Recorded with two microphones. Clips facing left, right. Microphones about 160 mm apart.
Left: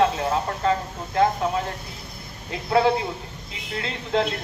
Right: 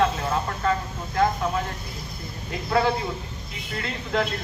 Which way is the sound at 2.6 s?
25° left (ahead or behind).